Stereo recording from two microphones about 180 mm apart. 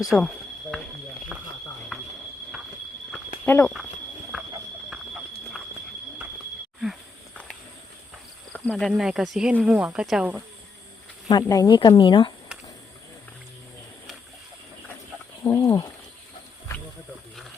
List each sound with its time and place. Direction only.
0.1 s speech: 5° left (ahead or behind)
3.4 s speech: 10° left (ahead or behind)
8.5 s speech: 5° left (ahead or behind)
11.3 s speech: 20° left (ahead or behind)
15.4 s a sound: 20° left (ahead or behind)